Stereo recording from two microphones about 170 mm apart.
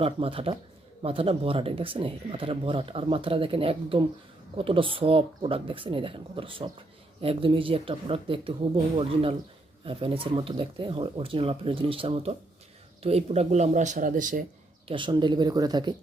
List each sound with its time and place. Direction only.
0.0 s speech: 35° right (ahead or behind)
9.8 s speech: 30° right (ahead or behind); by 14.4 s 50° right (ahead or behind)
14.8 s speech: 30° right (ahead or behind)